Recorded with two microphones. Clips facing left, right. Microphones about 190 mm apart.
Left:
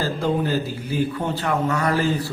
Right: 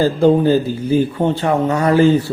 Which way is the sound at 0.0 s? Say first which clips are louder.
Right 10 dB; 30° right (ahead or behind).